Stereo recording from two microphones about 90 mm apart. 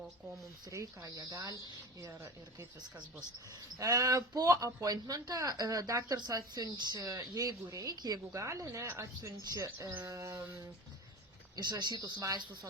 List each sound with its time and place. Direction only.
0.7 s speech: 35° right (ahead or behind)
3.8 s speech: 40° right (ahead or behind)
8.3 s speech: 35° right (ahead or behind)
11.5 s speech: 50° right (ahead or behind)